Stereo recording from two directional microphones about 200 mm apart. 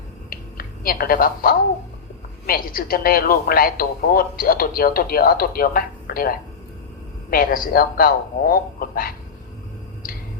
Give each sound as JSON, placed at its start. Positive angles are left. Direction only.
{"t": 0.3, "sound": "finger snapping", "side_deg": 45}
{"t": 2.5, "sound": "a woman's voice", "side_deg": 45}